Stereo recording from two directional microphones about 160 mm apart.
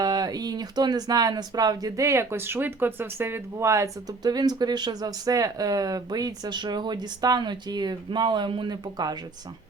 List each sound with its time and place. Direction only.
0.0 s speech: 25° right (ahead or behind)